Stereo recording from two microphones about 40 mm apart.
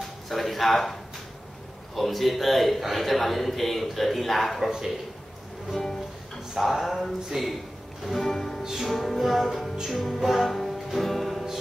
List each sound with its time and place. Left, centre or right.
0.3 s a sound: centre
2.0 s a man's voice: centre
4.6 s a man's voice: centre
5.7 s music: centre
6.6 s a man's voice: centre
9.8 s music: centre